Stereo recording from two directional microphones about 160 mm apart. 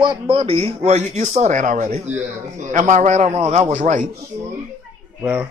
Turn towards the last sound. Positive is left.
turn(degrees=-10)  # may be behind; listen again after turning